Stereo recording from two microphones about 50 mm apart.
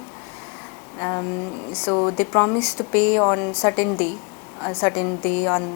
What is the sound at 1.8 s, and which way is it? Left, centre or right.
Speech, left.